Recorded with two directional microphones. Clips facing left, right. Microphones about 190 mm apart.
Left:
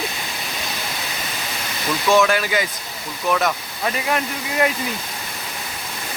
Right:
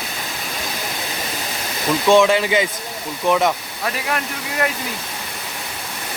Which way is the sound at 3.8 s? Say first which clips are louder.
Left 4 dB; centre (ahead or behind).